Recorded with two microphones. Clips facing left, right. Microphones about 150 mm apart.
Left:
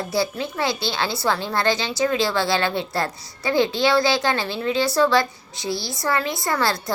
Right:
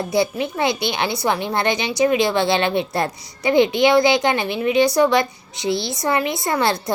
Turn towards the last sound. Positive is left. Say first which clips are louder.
# right 3 dB
turn(degrees=-20)  # may be behind; listen again after turning